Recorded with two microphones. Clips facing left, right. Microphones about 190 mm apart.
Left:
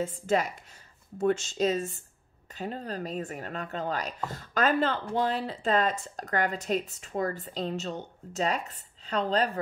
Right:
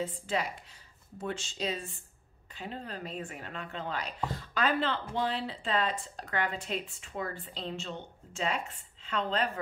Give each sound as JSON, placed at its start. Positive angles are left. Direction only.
{"t": 0.0, "sound": "speech", "side_deg": 45}